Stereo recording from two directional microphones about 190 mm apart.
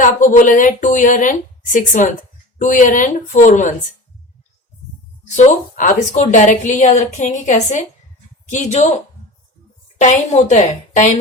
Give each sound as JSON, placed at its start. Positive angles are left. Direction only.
{"t": 0.0, "sound": "a woman's voice", "side_deg": 45}
{"t": 5.4, "sound": "a woman's voice", "side_deg": 45}
{"t": 10.0, "sound": "a woman's voice", "side_deg": 40}